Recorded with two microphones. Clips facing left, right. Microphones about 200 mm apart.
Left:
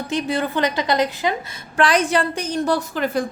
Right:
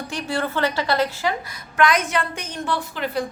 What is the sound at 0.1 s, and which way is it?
A woman's voice, 20° left (ahead or behind).